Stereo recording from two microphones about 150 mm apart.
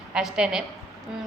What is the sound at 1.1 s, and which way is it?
Music, 5° right (ahead or behind).